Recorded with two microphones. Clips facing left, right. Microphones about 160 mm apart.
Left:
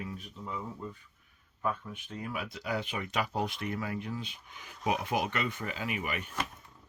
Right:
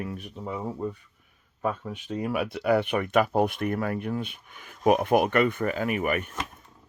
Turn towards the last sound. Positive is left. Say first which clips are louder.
# right 9 dB
turn(degrees=-55)  # may be behind; listen again after turning